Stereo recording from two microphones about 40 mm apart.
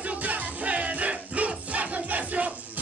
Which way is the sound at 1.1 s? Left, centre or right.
Right.